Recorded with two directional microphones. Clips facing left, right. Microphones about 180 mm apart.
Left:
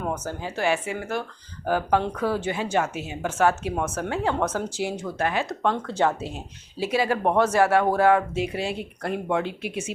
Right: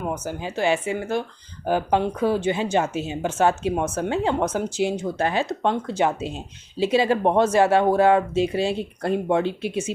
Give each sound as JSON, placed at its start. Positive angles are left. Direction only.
{"t": 0.1, "sound": "speech", "side_deg": -15}
{"t": 5.7, "sound": "speech", "side_deg": -15}
{"t": 6.7, "sound": "speech", "side_deg": -25}